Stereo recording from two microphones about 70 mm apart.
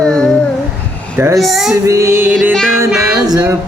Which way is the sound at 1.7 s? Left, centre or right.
Right.